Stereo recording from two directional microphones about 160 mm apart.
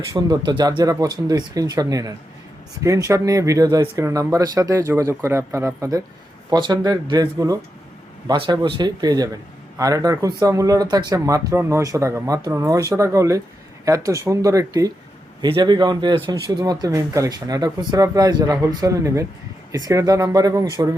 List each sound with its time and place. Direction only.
0.1 s a man's voice: 25° right (ahead or behind)